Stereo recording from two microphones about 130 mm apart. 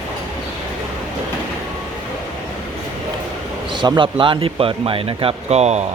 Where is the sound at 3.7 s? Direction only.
35° right (ahead or behind); by 5.9 s 55° right (ahead or behind).